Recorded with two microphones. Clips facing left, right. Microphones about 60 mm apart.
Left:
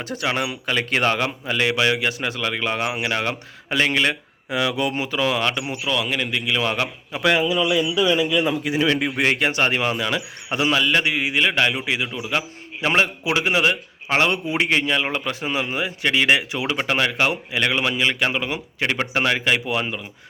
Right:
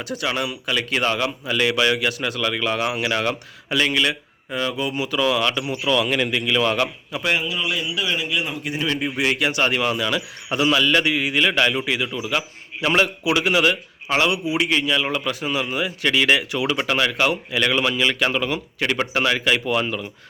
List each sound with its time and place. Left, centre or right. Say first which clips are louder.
0.0 s speech: left 1 dB; left
1.5 s a man's voice: right 1 dB; left
2.8 s a man's voice: right 1 dB; centre
3.7 s speech: even; left
4.4 s speech: left 2 dB; left
4.9 s a man's voice: right 1 dB; left
5.8 s a man's voice: right 4 dB; centre
7.1 s speech: left 6 dB; left
8.8 s a man's voice: left 2 dB; left; by 20.1 s centre